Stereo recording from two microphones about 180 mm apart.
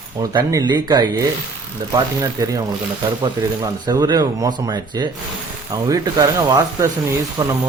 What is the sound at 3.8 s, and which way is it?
A man's voice, 25° right (ahead or behind).